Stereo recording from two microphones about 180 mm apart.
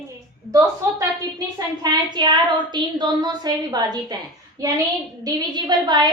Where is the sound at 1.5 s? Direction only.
20° right (ahead or behind).